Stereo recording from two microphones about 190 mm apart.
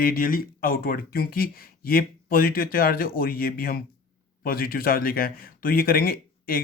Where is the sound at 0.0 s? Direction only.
50° left (ahead or behind).